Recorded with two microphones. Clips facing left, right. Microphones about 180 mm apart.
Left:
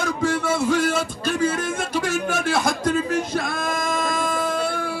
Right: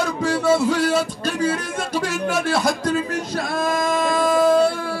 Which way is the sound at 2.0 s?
50° left (ahead or behind).